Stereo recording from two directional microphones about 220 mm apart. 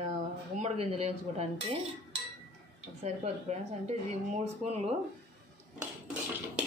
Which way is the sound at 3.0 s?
30° right (ahead or behind).